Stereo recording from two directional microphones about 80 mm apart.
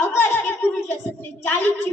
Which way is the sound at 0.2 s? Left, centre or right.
Left.